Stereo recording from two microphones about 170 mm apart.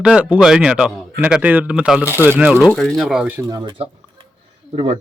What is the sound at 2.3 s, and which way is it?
Speech, 5° right (ahead or behind).